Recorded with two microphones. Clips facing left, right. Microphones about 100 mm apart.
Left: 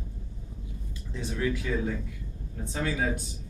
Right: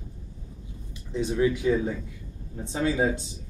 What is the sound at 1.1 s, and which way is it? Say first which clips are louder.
Speech: right 6 dB; 20° right (ahead or behind).